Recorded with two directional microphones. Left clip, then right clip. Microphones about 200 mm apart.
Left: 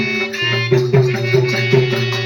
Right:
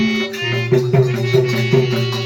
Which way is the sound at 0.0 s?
45° right (ahead or behind).